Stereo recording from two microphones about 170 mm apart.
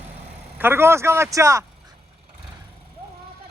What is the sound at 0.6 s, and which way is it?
Speech, 15° right (ahead or behind).